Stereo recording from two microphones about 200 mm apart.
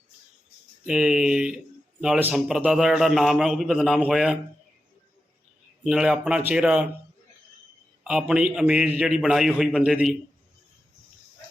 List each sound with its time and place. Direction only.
0.9 s a man's voice: 5° right (ahead or behind)
5.8 s a man's voice: 5° right (ahead or behind)
8.0 s a man's voice: 5° right (ahead or behind)